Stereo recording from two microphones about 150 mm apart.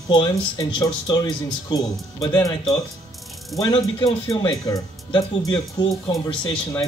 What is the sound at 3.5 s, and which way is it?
Speech, 25° left (ahead or behind).